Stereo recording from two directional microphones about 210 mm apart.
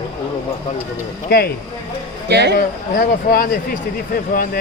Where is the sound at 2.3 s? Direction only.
55° right (ahead or behind).